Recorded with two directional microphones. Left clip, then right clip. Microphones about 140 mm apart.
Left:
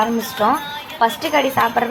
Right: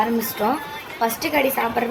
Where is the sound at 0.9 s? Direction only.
10° left (ahead or behind).